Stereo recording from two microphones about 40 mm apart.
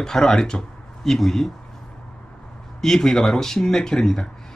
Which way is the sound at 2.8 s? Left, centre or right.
Centre.